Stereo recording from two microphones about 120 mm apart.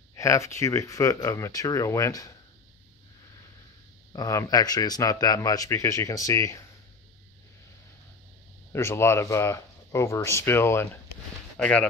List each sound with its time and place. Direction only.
0.1 s speech: 25° left (ahead or behind)
4.1 s speech: 30° left (ahead or behind)
8.7 s speech: 20° left (ahead or behind)
11.5 s speech: 10° left (ahead or behind)